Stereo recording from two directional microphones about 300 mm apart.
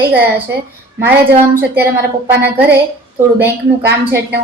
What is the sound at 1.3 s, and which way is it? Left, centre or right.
Speech, right.